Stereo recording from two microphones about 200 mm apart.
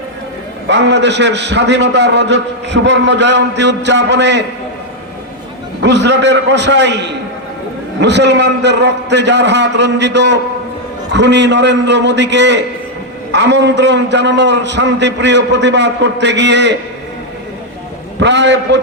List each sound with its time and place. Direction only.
0.7 s a man's voice: 60° right (ahead or behind)
5.8 s a man's voice: 60° right (ahead or behind)
18.2 s a man's voice: 65° right (ahead or behind)